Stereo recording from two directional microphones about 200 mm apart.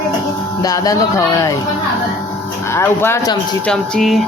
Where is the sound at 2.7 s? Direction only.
10° left (ahead or behind).